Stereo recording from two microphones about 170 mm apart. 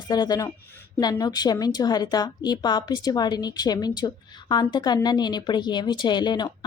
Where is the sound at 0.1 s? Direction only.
20° left (ahead or behind).